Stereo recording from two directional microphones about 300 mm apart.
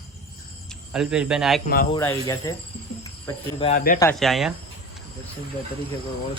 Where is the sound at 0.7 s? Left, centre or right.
Centre.